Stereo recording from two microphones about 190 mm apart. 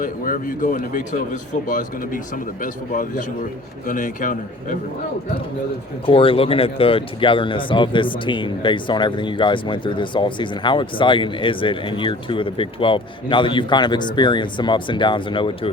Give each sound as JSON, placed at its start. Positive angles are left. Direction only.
{"t": 0.0, "sound": "speech", "side_deg": 45}
{"t": 6.1, "sound": "speech", "side_deg": 30}